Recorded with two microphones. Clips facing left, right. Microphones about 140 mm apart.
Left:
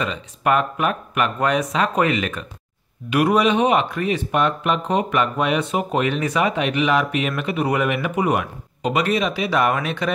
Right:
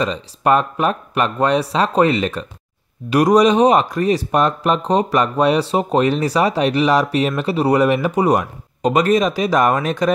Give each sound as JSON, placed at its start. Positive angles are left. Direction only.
{"t": 0.0, "sound": "speech", "side_deg": -35}